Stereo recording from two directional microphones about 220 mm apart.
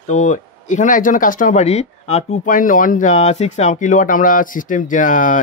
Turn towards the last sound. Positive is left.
turn(degrees=35)  # may be behind; listen again after turning